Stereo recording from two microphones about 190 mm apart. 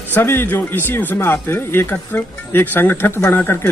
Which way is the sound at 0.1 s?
10° left (ahead or behind).